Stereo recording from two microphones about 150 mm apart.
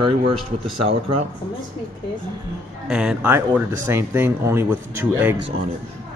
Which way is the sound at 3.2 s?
15° right (ahead or behind).